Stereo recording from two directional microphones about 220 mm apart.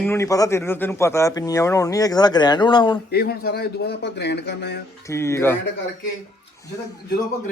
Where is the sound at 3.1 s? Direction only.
45° left (ahead or behind).